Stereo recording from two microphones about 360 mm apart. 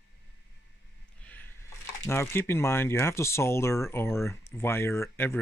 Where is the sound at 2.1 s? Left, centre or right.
Centre.